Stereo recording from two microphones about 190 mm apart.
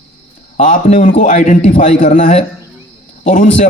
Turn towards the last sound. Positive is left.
turn(degrees=40)  # may be behind; listen again after turning